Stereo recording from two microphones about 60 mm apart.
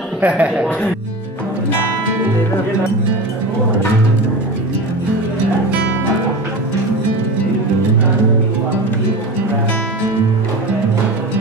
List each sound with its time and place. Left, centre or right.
0.2 s speech: right